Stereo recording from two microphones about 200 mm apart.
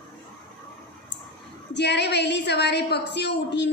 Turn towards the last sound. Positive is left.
turn(degrees=60)  # may be behind; listen again after turning